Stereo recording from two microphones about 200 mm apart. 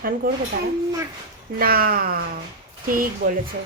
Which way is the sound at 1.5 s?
45° right (ahead or behind).